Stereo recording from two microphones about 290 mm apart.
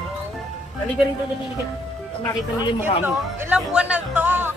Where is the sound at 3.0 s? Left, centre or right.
Centre.